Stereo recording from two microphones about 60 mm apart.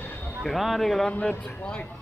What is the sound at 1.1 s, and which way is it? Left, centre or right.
Speech, centre.